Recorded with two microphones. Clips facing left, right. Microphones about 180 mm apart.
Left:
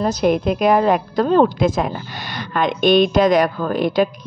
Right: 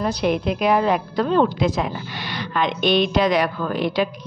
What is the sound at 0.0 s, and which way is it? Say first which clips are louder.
A woman's voice: left 4 dB; 45° left (ahead or behind).